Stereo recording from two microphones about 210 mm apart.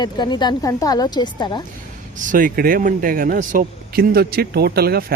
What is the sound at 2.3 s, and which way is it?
Speech, 40° right (ahead or behind).